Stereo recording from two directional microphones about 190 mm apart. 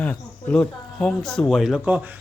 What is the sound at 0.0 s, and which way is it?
Speech, 5° left (ahead or behind).